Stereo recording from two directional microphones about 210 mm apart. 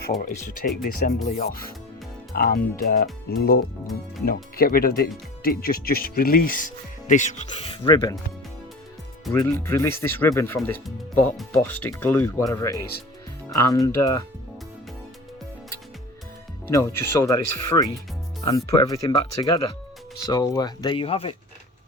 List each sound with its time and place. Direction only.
0.3 s speech: 40° left (ahead or behind)
7.9 s speech: 20° left (ahead or behind)
9.3 s speech: 10° left (ahead or behind)
16.7 s speech: 15° left (ahead or behind)